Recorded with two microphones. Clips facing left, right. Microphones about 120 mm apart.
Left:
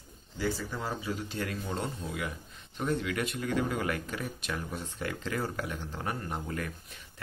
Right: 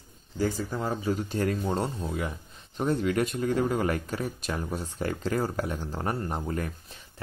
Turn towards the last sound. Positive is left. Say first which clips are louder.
# right 5 dB
turn(degrees=-35)  # may be behind; listen again after turning